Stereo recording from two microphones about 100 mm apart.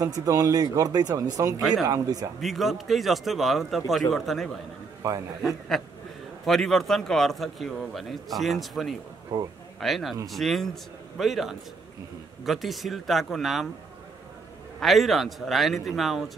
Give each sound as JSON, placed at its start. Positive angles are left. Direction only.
{"t": 0.0, "sound": "speech", "side_deg": -35}
{"t": 2.4, "sound": "a man's voice", "side_deg": 0}
{"t": 5.0, "sound": "speech", "side_deg": -35}
{"t": 5.4, "sound": "a man's voice", "side_deg": 0}
{"t": 9.3, "sound": "speech", "side_deg": -45}
{"t": 9.8, "sound": "a man's voice", "side_deg": 0}
{"t": 14.8, "sound": "a man's voice", "side_deg": 0}